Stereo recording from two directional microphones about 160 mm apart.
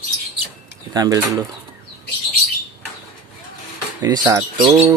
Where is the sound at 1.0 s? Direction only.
25° right (ahead or behind).